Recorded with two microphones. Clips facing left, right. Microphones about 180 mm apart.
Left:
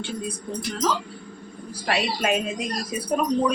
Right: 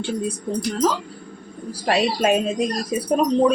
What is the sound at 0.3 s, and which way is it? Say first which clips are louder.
Speech: right 6 dB; 40° right (ahead or behind).